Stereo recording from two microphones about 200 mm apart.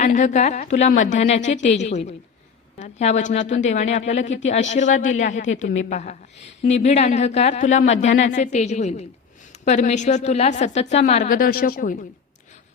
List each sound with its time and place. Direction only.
0.0 s a woman's voice: 35° left (ahead or behind)